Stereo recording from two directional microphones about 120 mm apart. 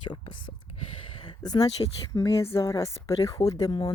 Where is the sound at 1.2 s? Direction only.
35° left (ahead or behind).